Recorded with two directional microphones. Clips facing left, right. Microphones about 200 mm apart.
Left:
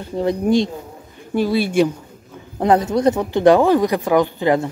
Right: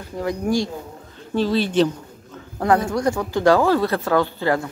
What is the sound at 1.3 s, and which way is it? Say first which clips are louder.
Speech: left 2 dB; 10° left (ahead or behind).